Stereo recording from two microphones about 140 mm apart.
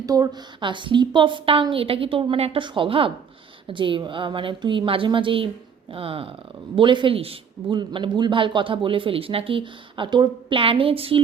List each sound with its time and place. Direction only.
0.0 s a man's voice: 25° right (ahead or behind); by 11.2 s 40° right (ahead or behind)